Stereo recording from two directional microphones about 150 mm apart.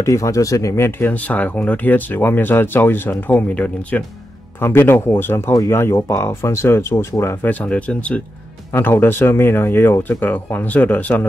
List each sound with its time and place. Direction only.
0.0 s speech: 20° left (ahead or behind)